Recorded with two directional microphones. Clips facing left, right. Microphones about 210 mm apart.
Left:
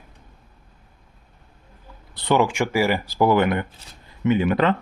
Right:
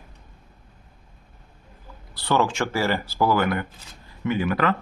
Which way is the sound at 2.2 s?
15° left (ahead or behind).